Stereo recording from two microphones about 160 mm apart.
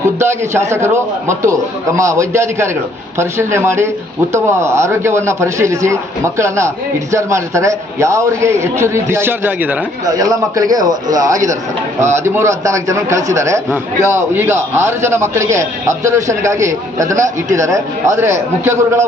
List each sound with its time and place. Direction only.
0.0 s a man's voice: 15° right (ahead or behind)
10.1 s a man's voice: 20° right (ahead or behind)